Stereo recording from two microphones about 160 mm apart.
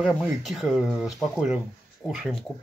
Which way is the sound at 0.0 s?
Centre (ahead or behind).